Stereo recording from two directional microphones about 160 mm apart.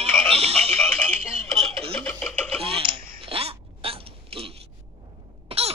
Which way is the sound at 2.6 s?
35° right (ahead or behind).